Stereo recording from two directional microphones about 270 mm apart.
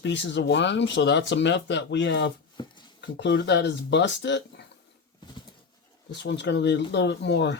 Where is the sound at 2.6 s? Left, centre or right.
Centre.